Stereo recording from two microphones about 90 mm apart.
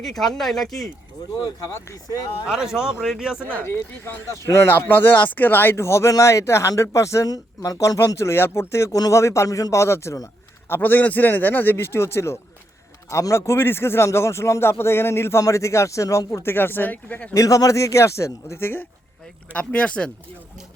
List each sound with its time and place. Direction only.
0.0 s speech: 5° left (ahead or behind)
1.4 s speech: 45° left (ahead or behind)
2.5 s speech: 5° right (ahead or behind)
3.4 s a man's voice: 25° left (ahead or behind)
4.9 s speech: 20° left (ahead or behind)
10.7 s a man's voice: 20° left (ahead or behind)
17.3 s speech: 40° left (ahead or behind)
19.5 s speech: 15° left (ahead or behind)